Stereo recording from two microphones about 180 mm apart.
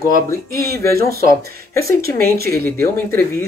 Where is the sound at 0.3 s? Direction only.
15° left (ahead or behind).